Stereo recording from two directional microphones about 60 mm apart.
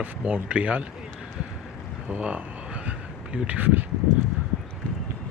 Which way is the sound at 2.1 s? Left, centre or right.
Right.